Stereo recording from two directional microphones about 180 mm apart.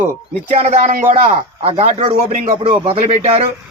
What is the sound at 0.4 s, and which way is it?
Speech, 35° right (ahead or behind).